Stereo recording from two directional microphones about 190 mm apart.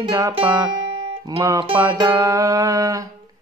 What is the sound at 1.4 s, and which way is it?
Music, 20° right (ahead or behind).